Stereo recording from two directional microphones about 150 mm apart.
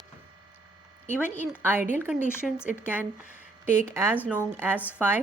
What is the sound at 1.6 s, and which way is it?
Speech, 15° right (ahead or behind).